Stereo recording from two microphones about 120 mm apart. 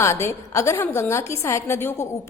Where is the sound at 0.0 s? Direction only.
20° left (ahead or behind).